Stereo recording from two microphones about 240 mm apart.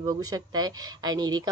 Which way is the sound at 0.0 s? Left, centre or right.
Centre.